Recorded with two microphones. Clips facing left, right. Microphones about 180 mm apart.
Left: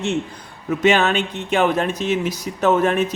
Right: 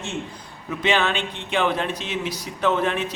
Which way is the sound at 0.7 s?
45° left (ahead or behind).